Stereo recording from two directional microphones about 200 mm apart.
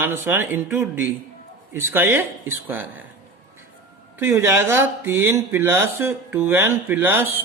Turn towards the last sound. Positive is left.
turn(degrees=-10)  # may be behind; listen again after turning